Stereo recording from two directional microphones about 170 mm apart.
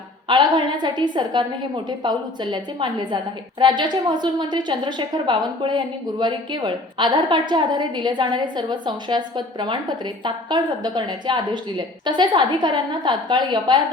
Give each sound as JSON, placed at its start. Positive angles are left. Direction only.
{"t": 0.3, "sound": "a woman's voice", "side_deg": -25}